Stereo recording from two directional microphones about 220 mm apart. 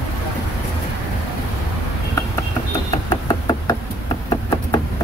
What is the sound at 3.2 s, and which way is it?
Knock, 15° left (ahead or behind).